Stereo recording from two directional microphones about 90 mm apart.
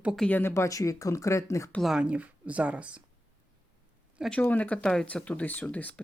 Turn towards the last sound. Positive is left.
turn(degrees=15)  # may be behind; listen again after turning